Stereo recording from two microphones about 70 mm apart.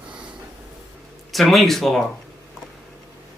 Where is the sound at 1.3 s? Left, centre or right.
Centre.